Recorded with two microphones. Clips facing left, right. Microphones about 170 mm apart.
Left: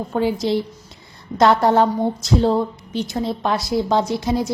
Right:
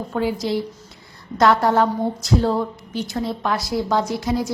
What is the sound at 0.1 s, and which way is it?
A woman's voice, 25° left (ahead or behind).